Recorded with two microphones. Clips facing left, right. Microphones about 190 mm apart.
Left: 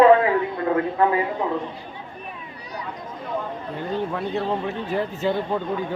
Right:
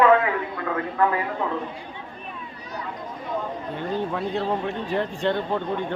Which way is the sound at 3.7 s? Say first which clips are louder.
Left 1 dB; centre (ahead or behind).